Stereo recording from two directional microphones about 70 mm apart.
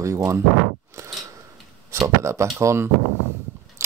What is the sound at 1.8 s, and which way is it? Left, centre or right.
Speech, right.